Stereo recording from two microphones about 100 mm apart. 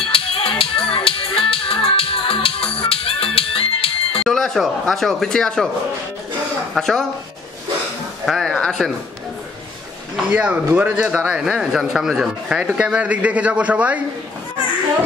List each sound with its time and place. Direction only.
0.1 s music: 65° left (ahead or behind)
4.2 s speech: 5° left (ahead or behind)
6.7 s speech: 5° left (ahead or behind)
8.3 s speech: 5° left (ahead or behind)
10.3 s a man's voice: 15° right (ahead or behind)